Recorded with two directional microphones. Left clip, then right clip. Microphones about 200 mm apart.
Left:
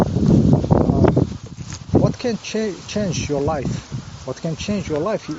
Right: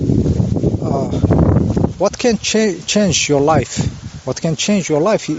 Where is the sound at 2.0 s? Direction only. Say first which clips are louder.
Right 8 dB; 60° right (ahead or behind).